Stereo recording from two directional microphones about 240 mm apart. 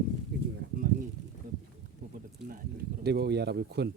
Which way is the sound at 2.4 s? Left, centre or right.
Right.